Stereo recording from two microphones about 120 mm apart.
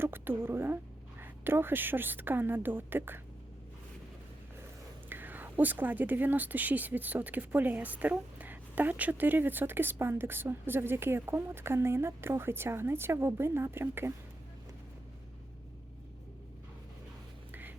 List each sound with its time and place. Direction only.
0.0 s a woman's voice: 20° right (ahead or behind)
5.0 s a woman's voice: 15° right (ahead or behind)
17.5 s music: 15° right (ahead or behind)